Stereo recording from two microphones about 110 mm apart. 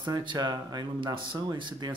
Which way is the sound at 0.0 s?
40° right (ahead or behind).